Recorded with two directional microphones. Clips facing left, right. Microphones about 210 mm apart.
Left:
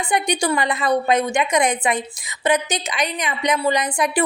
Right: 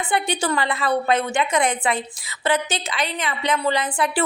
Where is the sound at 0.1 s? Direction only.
15° left (ahead or behind).